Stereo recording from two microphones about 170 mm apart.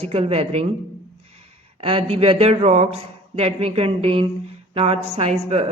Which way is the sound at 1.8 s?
35° right (ahead or behind).